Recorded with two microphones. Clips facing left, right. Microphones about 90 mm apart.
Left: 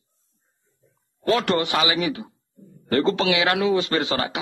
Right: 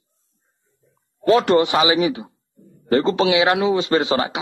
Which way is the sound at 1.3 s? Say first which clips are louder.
Right 6 dB; 25° right (ahead or behind).